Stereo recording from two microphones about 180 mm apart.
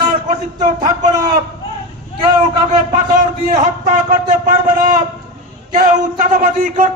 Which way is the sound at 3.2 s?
45° right (ahead or behind).